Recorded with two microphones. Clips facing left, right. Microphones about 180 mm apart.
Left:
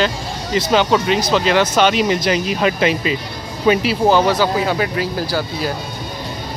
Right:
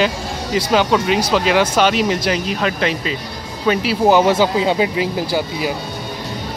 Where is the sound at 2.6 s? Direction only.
10° left (ahead or behind).